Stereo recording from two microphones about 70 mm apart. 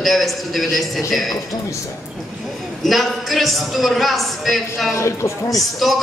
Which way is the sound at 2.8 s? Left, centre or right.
Centre.